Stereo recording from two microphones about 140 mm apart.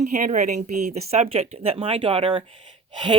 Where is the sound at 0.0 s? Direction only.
60° right (ahead or behind).